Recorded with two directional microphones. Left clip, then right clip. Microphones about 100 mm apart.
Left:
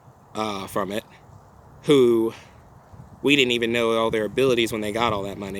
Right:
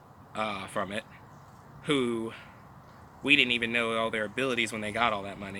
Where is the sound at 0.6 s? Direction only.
35° left (ahead or behind).